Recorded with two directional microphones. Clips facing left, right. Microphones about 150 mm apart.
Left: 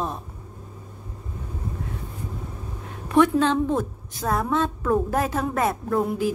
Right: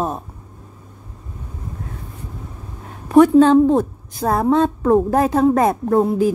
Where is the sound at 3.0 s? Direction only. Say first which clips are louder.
Right 8 dB; 35° right (ahead or behind).